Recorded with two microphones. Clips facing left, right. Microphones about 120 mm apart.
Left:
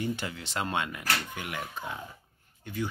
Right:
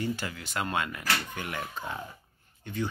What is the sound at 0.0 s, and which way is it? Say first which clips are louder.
Speech: even; 20° left (ahead or behind).